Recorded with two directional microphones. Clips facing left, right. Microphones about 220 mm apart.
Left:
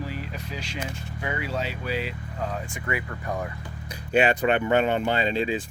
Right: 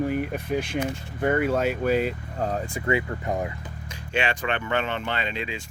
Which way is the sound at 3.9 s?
35° left (ahead or behind).